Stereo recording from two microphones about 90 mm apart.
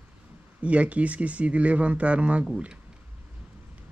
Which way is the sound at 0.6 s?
15° right (ahead or behind).